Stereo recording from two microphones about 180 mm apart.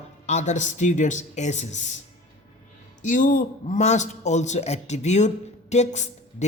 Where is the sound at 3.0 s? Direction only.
45° left (ahead or behind).